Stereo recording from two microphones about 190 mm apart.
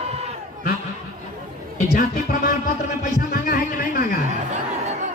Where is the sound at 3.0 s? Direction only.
45° left (ahead or behind).